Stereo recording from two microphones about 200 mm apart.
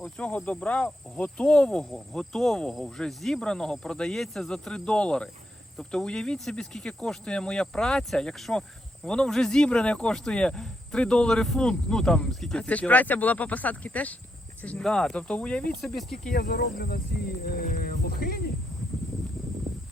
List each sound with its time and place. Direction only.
0.0 s speech: 5° left (ahead or behind)
16.2 s speech: 50° left (ahead or behind)